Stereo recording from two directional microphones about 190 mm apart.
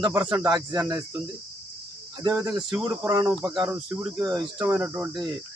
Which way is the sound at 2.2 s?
20° right (ahead or behind).